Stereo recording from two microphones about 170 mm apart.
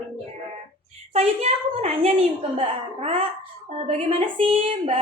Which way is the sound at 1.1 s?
35° right (ahead or behind).